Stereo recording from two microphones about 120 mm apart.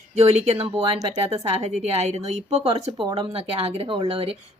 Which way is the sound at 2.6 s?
45° right (ahead or behind).